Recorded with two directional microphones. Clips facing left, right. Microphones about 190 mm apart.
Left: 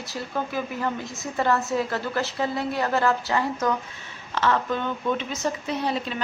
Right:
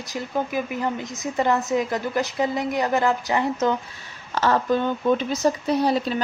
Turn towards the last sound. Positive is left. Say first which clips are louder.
# right 6 dB
turn(degrees=-40)  # may be behind; listen again after turning